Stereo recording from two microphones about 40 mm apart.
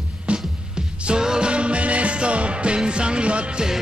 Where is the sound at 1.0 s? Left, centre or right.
Centre.